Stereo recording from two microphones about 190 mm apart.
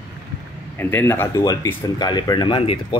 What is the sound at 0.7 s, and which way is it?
Speech, 10° left (ahead or behind).